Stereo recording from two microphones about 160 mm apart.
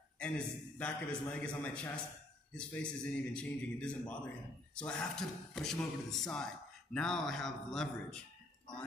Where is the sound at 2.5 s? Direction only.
5° left (ahead or behind).